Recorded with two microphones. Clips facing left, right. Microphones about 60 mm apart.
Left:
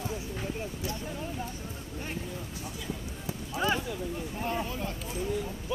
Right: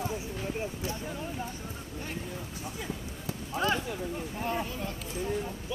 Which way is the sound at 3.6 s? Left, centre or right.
Centre.